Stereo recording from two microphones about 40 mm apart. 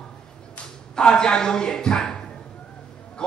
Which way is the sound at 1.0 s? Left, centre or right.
Centre.